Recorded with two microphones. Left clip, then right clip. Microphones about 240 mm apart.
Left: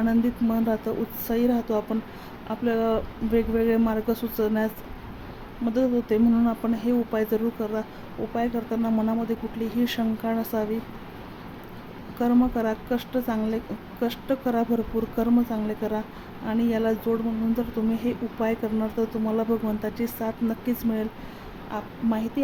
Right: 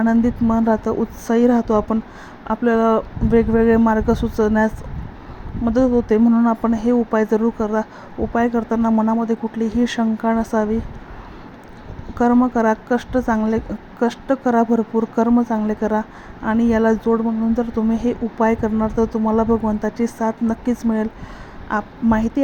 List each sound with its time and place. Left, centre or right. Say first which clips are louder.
0.0 s speech: right 7 dB; centre
5.7 s speech: right 7 dB; centre
12.1 s a woman's voice: right 7 dB; centre